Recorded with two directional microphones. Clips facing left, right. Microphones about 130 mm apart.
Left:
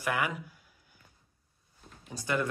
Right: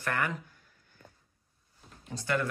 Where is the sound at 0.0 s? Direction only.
10° left (ahead or behind).